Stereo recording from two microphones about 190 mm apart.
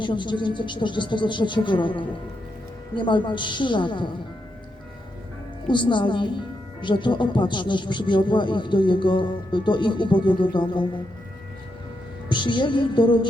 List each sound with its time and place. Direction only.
0.0 s speech: 25° left (ahead or behind)
5.6 s speech: 25° left (ahead or behind)
12.3 s speech: 25° left (ahead or behind)